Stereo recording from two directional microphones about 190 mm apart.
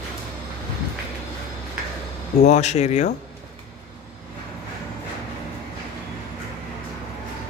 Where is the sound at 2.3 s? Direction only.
35° left (ahead or behind).